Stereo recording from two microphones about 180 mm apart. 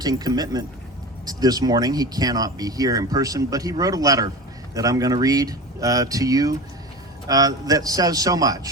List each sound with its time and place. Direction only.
0.0 s speech: 20° right (ahead or behind)